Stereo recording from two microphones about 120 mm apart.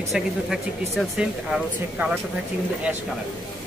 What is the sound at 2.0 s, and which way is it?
Speech, 15° right (ahead or behind).